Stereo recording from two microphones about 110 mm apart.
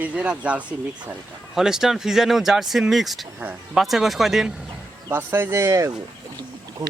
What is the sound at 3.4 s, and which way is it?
Speech, 15° right (ahead or behind).